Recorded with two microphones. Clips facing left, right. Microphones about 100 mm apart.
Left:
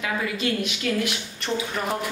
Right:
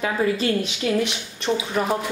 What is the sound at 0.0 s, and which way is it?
A woman's voice, 35° right (ahead or behind).